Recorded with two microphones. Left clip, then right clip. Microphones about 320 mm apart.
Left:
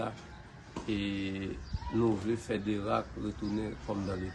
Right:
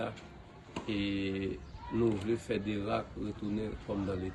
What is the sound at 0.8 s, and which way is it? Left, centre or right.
Speech, centre.